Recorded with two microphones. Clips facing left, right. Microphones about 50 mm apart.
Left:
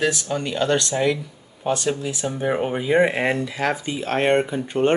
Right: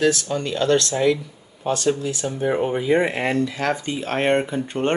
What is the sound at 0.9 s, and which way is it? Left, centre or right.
Speech, centre.